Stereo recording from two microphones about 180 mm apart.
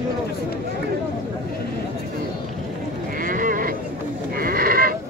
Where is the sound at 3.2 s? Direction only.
50° right (ahead or behind).